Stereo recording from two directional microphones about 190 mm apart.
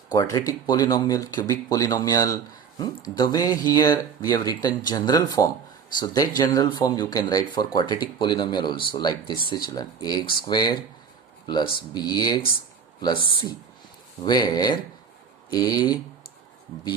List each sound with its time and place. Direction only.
0.1 s speech: 20° left (ahead or behind)
14.3 s speech: 20° left (ahead or behind)